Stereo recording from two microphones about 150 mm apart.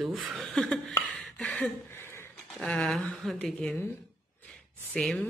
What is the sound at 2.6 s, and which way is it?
Speech, 5° left (ahead or behind).